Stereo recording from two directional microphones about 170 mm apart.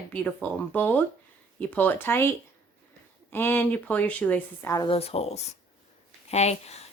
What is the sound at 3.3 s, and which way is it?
Speech, 10° left (ahead or behind).